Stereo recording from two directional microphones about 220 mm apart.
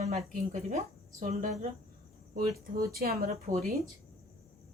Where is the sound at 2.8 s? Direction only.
45° right (ahead or behind).